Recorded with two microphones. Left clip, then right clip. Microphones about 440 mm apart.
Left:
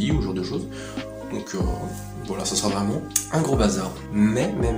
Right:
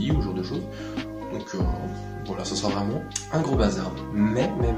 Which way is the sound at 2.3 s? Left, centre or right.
Right.